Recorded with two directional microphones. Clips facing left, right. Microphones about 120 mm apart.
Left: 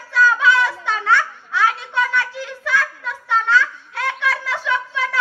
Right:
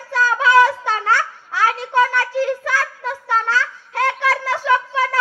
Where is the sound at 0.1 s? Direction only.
40° right (ahead or behind).